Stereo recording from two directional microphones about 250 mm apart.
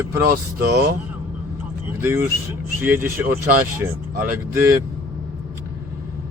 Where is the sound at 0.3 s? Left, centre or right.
Right.